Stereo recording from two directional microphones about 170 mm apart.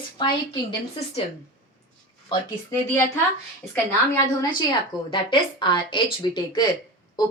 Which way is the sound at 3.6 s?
15° left (ahead or behind).